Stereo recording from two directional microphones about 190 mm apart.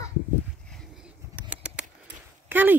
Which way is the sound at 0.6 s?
Centre (ahead or behind).